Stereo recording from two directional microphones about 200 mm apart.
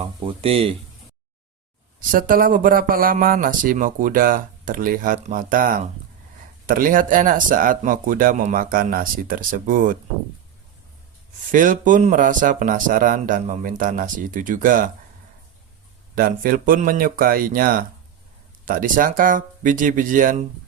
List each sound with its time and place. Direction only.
0.0 s speech: 25° right (ahead or behind)
2.0 s speech: 45° right (ahead or behind)
11.5 s speech: 40° right (ahead or behind)
16.1 s speech: 45° right (ahead or behind)